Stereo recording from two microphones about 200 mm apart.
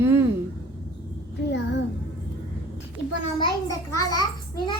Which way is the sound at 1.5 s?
60° left (ahead or behind).